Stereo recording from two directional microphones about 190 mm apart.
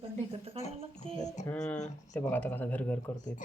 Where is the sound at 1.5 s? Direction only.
5° left (ahead or behind).